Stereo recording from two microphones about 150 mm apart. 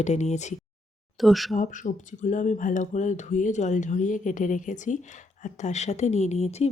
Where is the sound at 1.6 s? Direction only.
60° left (ahead or behind).